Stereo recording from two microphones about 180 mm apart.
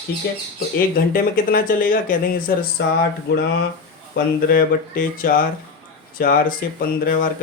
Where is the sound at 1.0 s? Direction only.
55° left (ahead or behind).